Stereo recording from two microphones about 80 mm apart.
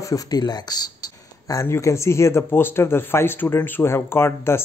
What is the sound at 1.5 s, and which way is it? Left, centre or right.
Speech, left.